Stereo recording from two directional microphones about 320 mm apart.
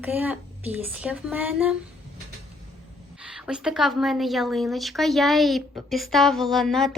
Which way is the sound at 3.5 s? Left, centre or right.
Centre.